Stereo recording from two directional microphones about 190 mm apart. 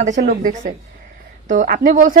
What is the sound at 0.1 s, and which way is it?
A woman's voice, 40° right (ahead or behind).